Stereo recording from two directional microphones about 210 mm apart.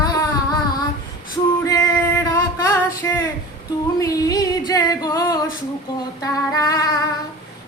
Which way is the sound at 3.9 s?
15° left (ahead or behind).